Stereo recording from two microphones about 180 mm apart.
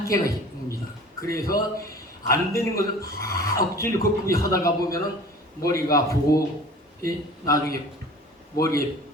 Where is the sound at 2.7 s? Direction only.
55° left (ahead or behind).